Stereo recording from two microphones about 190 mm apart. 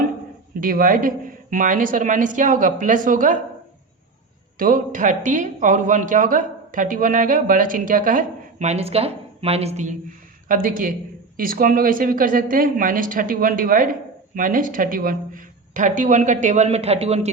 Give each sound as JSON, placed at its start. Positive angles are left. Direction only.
{"t": 0.6, "sound": "speech", "side_deg": -45}
{"t": 4.5, "sound": "speech", "side_deg": -45}
{"t": 10.5, "sound": "a woman's voice", "side_deg": -45}